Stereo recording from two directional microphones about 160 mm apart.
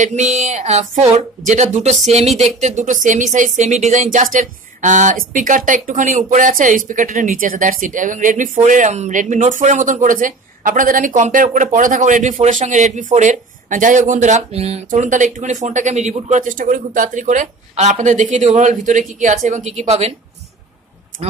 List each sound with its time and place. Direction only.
0.0 s speech: 45° right (ahead or behind)
14.9 s speech: 50° right (ahead or behind)